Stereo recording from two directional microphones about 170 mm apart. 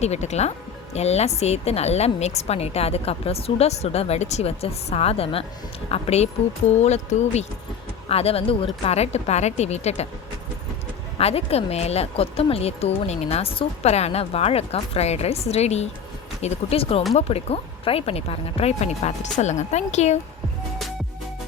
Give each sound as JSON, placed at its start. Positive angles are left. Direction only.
{"t": 0.0, "sound": "speech", "side_deg": 40}
{"t": 11.2, "sound": "speech", "side_deg": 35}